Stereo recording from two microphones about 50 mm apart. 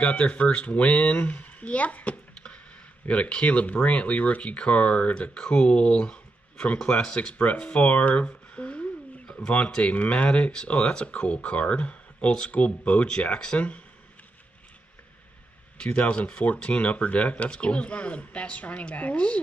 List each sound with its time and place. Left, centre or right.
0.0 s speech: left
9.2 s pigeon: centre
9.7 s speech: left
15.8 s speech: left